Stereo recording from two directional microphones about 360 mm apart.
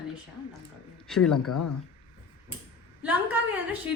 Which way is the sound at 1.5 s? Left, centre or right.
Left.